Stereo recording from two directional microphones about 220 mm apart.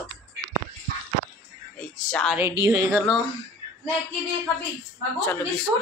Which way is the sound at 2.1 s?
5° left (ahead or behind).